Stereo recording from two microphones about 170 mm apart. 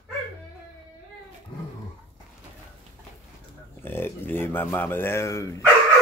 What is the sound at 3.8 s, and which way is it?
Speech, 15° left (ahead or behind).